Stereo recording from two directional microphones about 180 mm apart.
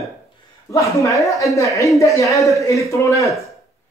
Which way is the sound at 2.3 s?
Centre (ahead or behind).